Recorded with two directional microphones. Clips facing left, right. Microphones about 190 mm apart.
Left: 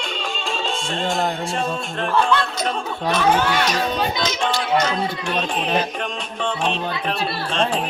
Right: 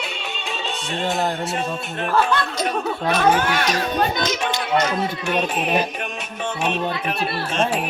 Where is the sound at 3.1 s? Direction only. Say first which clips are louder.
Even; 50° right (ahead or behind).